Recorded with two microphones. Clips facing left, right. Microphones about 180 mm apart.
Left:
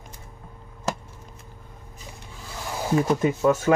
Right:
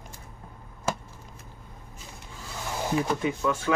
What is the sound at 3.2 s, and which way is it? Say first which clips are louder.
Speech: left 6 dB; 45° left (ahead or behind).